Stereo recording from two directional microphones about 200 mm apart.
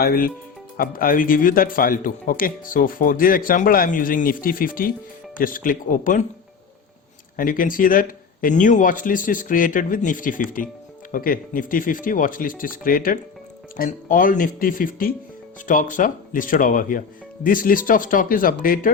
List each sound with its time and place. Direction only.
0.0 s speech: 50° left (ahead or behind)
7.3 s speech: 45° left (ahead or behind)